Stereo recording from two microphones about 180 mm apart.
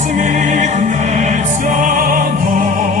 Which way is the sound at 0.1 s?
45° right (ahead or behind).